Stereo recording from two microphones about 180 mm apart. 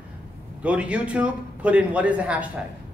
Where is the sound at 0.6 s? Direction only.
5° right (ahead or behind).